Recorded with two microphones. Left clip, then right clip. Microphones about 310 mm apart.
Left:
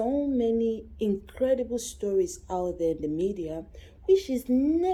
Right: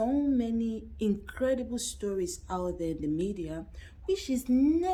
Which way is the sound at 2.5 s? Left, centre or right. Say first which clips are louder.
Left 4 dB; right.